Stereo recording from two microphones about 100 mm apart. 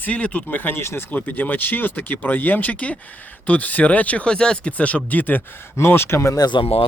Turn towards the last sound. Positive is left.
turn(degrees=50)  # may be behind; listen again after turning